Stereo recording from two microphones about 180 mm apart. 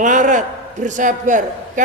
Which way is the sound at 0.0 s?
45° right (ahead or behind).